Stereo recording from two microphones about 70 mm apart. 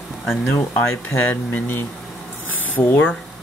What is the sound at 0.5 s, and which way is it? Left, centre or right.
Speech, left.